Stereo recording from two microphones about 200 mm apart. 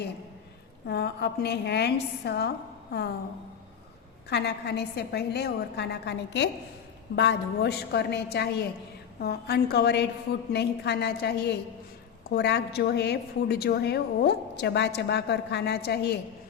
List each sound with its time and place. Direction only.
0.9 s a woman's voice: 55° left (ahead or behind)
4.3 s a woman's voice: 55° left (ahead or behind)